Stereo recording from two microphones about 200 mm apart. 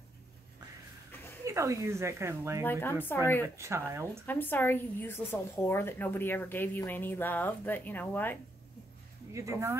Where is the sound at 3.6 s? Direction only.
15° right (ahead or behind).